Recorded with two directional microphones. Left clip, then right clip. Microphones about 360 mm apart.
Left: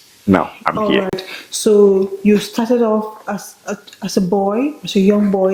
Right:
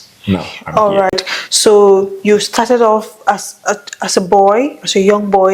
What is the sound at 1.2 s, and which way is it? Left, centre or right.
Speech, right.